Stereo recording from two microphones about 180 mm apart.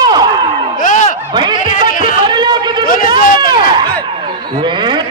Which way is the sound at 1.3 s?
25° right (ahead or behind).